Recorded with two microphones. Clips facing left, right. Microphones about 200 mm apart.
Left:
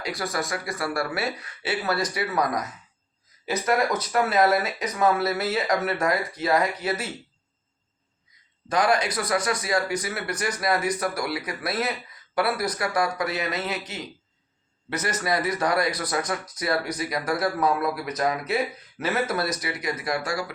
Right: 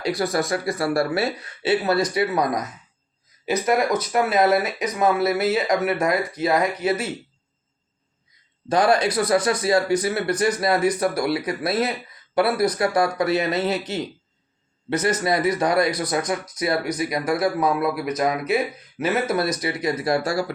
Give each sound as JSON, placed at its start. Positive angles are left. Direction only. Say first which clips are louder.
{"t": 0.0, "sound": "speech", "louder": "right 6 dB", "side_deg": -30}
{"t": 8.7, "sound": "speech", "louder": "right 4 dB", "side_deg": -30}